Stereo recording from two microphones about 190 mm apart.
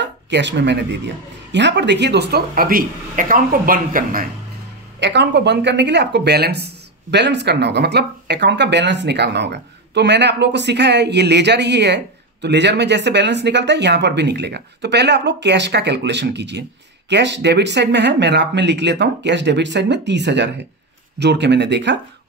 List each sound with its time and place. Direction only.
0.0 s speech: 65° right (ahead or behind); by 4.3 s 50° right (ahead or behind)
5.0 s speech: 65° right (ahead or behind)